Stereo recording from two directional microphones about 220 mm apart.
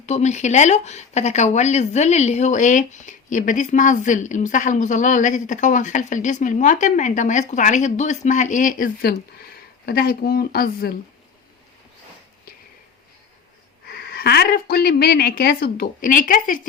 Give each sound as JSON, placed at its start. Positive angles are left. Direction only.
{"t": 0.0, "sound": "speech", "side_deg": 30}
{"t": 13.8, "sound": "speech", "side_deg": 45}